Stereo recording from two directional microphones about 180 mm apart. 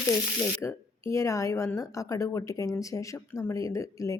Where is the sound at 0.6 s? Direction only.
15° left (ahead or behind).